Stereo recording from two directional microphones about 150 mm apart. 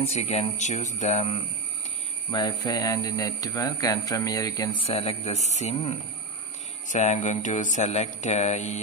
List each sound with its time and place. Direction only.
0.0 s speech: 45° left (ahead or behind)
2.3 s speech: 30° left (ahead or behind)
4.8 s speech: 40° left (ahead or behind)
6.9 s mantra: 55° left (ahead or behind)
7.4 s speech: 55° left (ahead or behind)